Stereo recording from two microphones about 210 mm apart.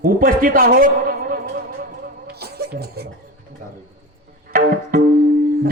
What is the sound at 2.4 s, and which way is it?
Music, 50° right (ahead or behind).